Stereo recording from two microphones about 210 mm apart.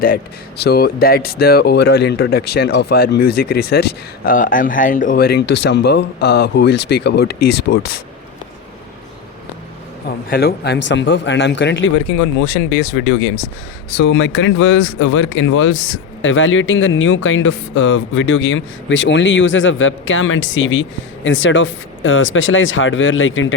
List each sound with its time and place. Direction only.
0.0 s speech: 45° left (ahead or behind)
10.2 s a man's voice: 45° left (ahead or behind); by 13.4 s 70° left (ahead or behind)
13.9 s speech: 55° left (ahead or behind)